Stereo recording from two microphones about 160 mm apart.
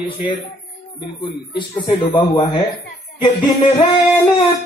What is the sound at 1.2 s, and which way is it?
Speech, 30° left (ahead or behind).